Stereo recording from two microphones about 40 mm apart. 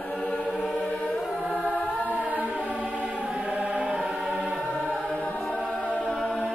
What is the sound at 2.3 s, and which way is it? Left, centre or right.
Choir, right.